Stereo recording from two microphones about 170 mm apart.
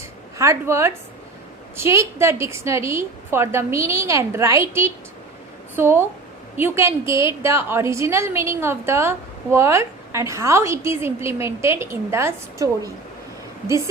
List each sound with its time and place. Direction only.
0.3 s a woman's voice: 15° right (ahead or behind)